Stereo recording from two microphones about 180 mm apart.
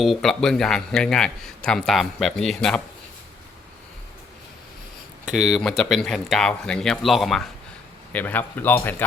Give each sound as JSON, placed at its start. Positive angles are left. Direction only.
{"t": 0.0, "sound": "a man's voice", "side_deg": 0}
{"t": 5.2, "sound": "a man's voice", "side_deg": -5}